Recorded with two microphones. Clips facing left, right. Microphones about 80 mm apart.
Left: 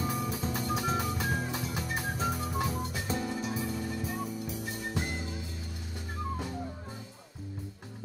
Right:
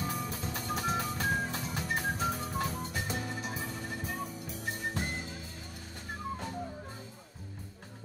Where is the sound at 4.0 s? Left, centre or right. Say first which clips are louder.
Left 3 dB; centre.